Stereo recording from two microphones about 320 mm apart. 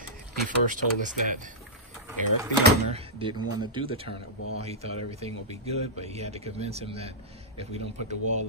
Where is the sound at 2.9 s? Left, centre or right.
Centre.